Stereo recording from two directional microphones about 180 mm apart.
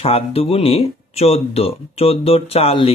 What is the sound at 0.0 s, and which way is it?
Speech, 35° left (ahead or behind).